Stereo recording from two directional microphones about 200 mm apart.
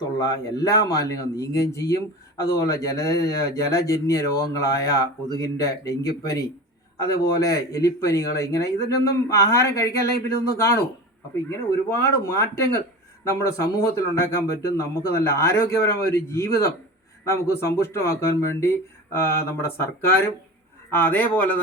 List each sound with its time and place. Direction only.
0.2 s speech: 20° left (ahead or behind)
11.4 s speech: 15° left (ahead or behind)